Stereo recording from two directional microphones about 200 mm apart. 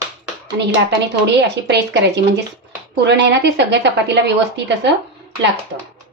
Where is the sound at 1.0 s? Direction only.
60° right (ahead or behind).